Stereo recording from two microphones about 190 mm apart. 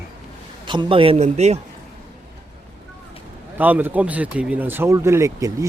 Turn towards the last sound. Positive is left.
turn(degrees=-15)  # may be behind; listen again after turning